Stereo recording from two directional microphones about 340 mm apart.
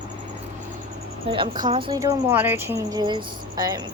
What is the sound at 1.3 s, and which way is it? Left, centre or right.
A woman's voice, centre.